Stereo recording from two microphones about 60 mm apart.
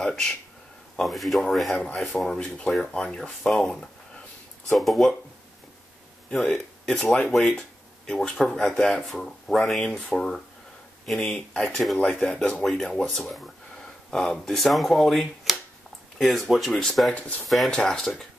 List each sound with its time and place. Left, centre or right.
0.0 s speech: centre
6.3 s speech: centre
11.3 s speech: left
11.7 s speech: centre
12.1 s speech: centre